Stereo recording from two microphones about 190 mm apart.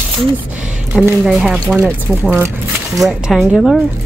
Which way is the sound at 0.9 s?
5° right (ahead or behind).